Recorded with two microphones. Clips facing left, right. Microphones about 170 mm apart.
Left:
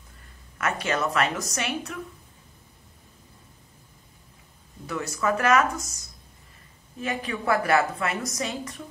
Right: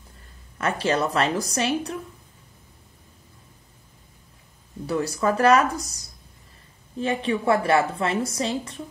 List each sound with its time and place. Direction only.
0.6 s a woman's voice: 30° right (ahead or behind)
4.8 s a woman's voice: 35° right (ahead or behind)